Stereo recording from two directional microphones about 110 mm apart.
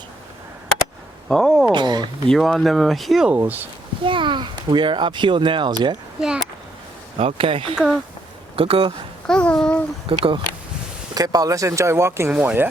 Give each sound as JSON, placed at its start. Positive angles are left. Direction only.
{"t": 1.3, "sound": "speech", "side_deg": 5}
{"t": 1.7, "sound": "a sound", "side_deg": -40}
{"t": 2.3, "sound": "speech", "side_deg": 0}
{"t": 3.3, "sound": "speech", "side_deg": -15}
{"t": 4.0, "sound": "speech", "side_deg": -50}
{"t": 6.1, "sound": "speech", "side_deg": -5}
{"t": 7.2, "sound": "speech", "side_deg": -60}
{"t": 9.2, "sound": "a child's voice", "side_deg": 10}
{"t": 10.1, "sound": "speech", "side_deg": -50}
{"t": 11.1, "sound": "speech", "side_deg": -35}